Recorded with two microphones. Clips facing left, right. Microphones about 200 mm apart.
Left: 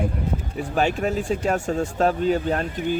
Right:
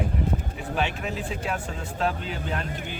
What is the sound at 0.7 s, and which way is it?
Speech, 45° left (ahead or behind).